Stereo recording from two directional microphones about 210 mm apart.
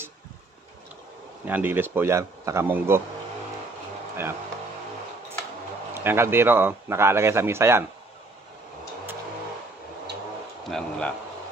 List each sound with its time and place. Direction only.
1.4 s speech: 10° right (ahead or behind)
5.9 s speech: 10° right (ahead or behind)
10.7 s speech: 5° left (ahead or behind)